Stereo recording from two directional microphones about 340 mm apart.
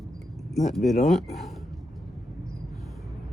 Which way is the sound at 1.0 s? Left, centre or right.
Centre.